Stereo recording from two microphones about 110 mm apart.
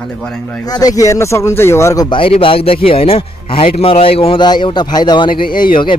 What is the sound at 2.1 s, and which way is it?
A man's voice, 55° left (ahead or behind).